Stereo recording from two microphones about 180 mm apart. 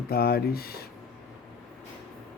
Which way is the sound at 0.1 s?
60° left (ahead or behind).